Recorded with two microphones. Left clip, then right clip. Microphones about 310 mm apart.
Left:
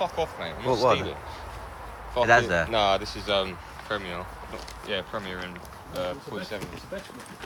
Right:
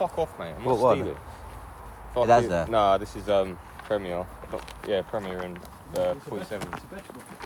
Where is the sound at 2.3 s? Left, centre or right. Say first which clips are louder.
Even; centre.